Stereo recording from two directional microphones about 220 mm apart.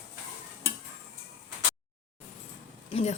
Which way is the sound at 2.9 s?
30° left (ahead or behind).